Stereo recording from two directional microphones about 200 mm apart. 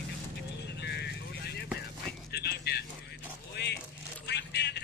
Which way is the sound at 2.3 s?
55° left (ahead or behind).